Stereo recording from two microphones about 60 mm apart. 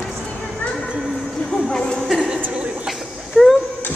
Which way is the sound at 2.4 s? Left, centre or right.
Right.